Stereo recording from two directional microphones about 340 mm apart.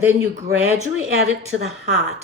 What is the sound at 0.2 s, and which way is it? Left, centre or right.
Speech, right.